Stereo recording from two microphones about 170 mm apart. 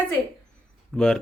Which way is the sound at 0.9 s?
5° left (ahead or behind).